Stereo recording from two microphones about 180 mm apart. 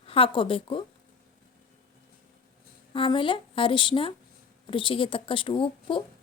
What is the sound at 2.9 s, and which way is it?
A woman's voice, 30° left (ahead or behind).